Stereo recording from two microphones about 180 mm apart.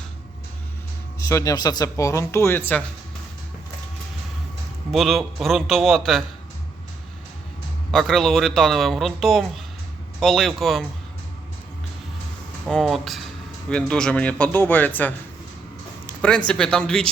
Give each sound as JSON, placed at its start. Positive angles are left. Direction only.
{"t": 1.3, "sound": "speech", "side_deg": 20}
{"t": 4.9, "sound": "speech", "side_deg": 0}
{"t": 7.9, "sound": "speech", "side_deg": 0}
{"t": 12.6, "sound": "speech", "side_deg": 0}
{"t": 16.5, "sound": "speech", "side_deg": 5}